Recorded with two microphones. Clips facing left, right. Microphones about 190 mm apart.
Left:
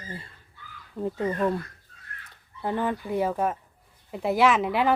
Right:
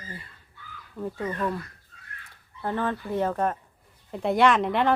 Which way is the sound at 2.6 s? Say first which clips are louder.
Left 1 dB; 15° left (ahead or behind).